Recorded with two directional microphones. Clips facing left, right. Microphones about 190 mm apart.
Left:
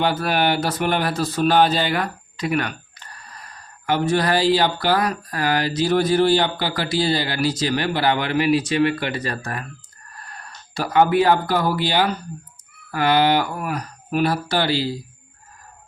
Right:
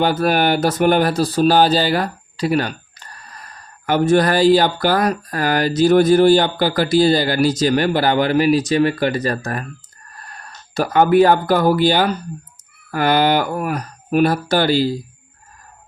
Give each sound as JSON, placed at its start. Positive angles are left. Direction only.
{"t": 0.0, "sound": "speech", "side_deg": -45}
{"t": 10.8, "sound": "speech", "side_deg": -45}